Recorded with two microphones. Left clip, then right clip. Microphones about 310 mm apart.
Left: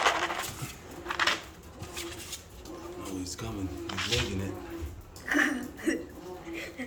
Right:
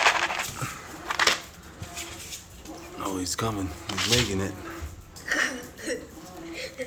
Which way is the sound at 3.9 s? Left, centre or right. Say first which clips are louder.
Right 6 dB; right.